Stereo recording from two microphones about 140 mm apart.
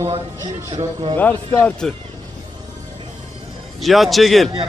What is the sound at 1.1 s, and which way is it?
Speech, 15° left (ahead or behind).